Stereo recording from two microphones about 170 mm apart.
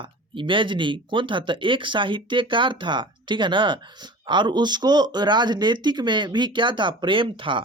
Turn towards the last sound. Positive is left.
turn(degrees=-30)  # may be behind; listen again after turning